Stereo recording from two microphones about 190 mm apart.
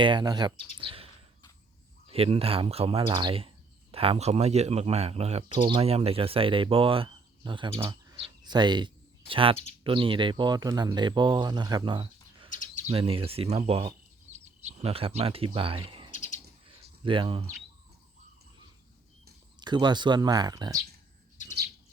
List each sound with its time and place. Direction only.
0.0 s speech: 25° right (ahead or behind)
0.8 s a sound: 25° right (ahead or behind)
2.0 s speech: 30° right (ahead or behind)
12.5 s bird: 45° left (ahead or behind)
12.8 s speech: 30° right (ahead or behind)
16.1 s bird: 40° left (ahead or behind)
17.0 s speech: 25° right (ahead or behind)
19.5 s speech: 25° right (ahead or behind)